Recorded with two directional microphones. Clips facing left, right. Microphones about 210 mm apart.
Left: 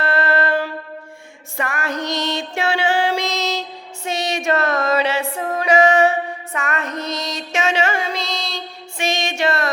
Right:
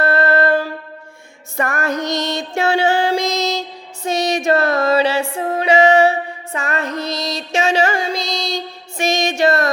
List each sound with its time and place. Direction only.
0.0 s music: 40° right (ahead or behind)
3.3 s music: 15° right (ahead or behind)
4.0 s music: 40° right (ahead or behind)